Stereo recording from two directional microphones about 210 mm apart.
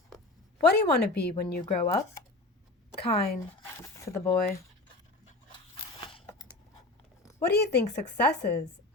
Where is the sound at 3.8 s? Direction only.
15° left (ahead or behind).